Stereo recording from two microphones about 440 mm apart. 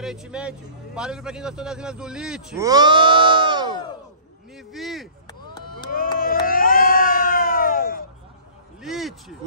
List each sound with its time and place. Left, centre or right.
0.0 s a man's voice: centre
5.8 s a sound: centre
8.8 s a man's voice: centre